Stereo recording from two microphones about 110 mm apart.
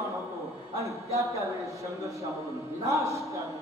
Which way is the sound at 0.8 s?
30° right (ahead or behind).